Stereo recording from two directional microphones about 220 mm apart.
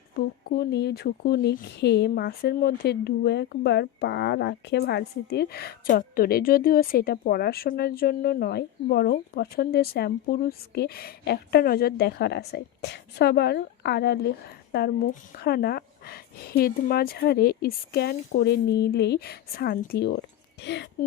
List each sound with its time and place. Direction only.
0.4 s speech: 45° left (ahead or behind)